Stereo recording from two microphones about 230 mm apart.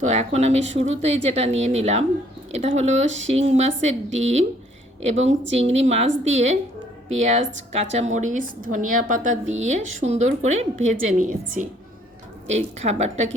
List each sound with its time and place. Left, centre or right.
0.0 s a woman's voice: right